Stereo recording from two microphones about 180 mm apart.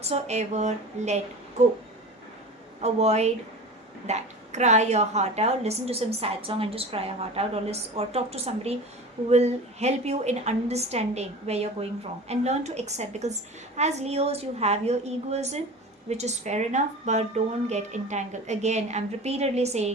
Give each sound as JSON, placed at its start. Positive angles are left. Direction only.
{"t": 0.1, "sound": "a woman's voice", "side_deg": -40}
{"t": 2.8, "sound": "a woman's voice", "side_deg": -35}